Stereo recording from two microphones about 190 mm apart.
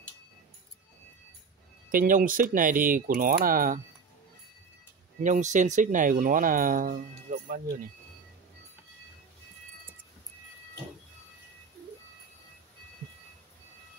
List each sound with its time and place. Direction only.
1.9 s speech: 45° right (ahead or behind)
5.2 s speech: 40° right (ahead or behind)